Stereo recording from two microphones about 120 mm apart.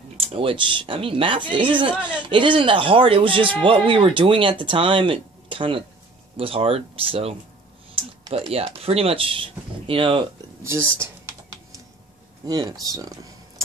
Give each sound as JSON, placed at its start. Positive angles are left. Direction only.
{"t": 0.2, "sound": "speech", "side_deg": -50}
{"t": 12.4, "sound": "speech", "side_deg": -35}